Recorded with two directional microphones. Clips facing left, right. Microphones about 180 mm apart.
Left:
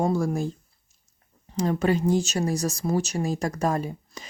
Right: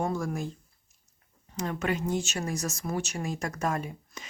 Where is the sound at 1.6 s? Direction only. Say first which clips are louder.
Left 7 dB; 35° left (ahead or behind).